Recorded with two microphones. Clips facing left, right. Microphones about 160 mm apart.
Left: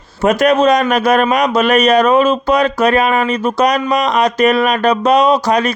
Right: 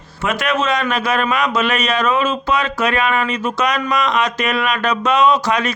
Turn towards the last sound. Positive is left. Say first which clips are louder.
# left 3 dB
turn(degrees=35)  # may be behind; listen again after turning